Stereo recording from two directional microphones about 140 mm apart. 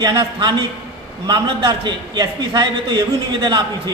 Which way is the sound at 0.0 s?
30° right (ahead or behind).